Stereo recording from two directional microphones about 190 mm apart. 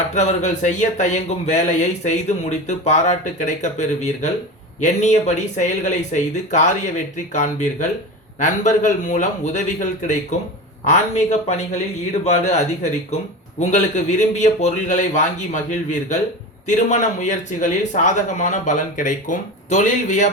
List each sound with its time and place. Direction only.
0.1 s speech: 35° left (ahead or behind)
10.8 s speech: 40° left (ahead or behind)